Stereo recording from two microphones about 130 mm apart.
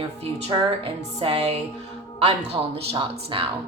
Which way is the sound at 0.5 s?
40° right (ahead or behind).